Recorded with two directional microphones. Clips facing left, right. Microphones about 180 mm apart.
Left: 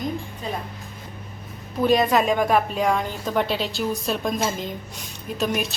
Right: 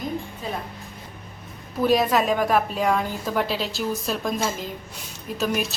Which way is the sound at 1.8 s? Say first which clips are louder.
Left 1 dB; 5° right (ahead or behind).